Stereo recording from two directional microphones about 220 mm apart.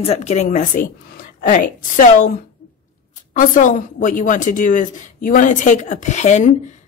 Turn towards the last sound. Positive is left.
turn(degrees=30)  # may be behind; listen again after turning